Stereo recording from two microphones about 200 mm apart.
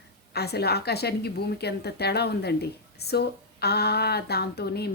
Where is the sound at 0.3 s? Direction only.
55° left (ahead or behind).